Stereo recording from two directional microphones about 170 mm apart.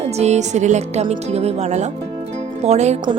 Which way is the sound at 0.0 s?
40° right (ahead or behind).